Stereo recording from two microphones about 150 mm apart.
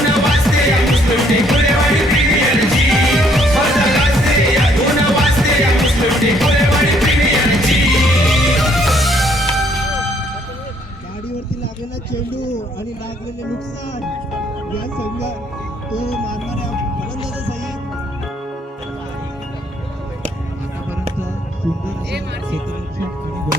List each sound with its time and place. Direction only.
0.1 s music: centre (ahead or behind)